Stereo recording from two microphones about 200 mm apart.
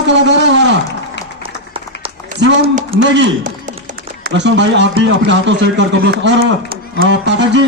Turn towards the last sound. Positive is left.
turn(degrees=-60)  # may be behind; listen again after turning